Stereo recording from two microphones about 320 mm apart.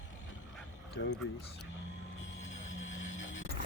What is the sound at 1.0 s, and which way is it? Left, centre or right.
Speech, left.